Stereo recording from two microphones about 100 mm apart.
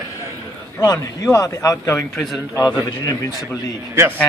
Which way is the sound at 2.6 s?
40° left (ahead or behind).